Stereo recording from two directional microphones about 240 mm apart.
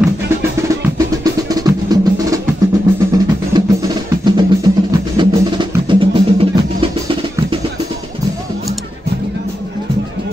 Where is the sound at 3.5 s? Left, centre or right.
Centre.